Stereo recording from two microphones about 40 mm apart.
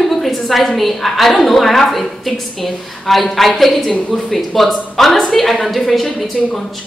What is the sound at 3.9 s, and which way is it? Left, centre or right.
Speech, left.